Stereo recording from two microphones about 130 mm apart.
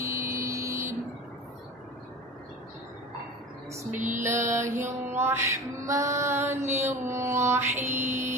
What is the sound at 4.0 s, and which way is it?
Mantra, 75° right (ahead or behind).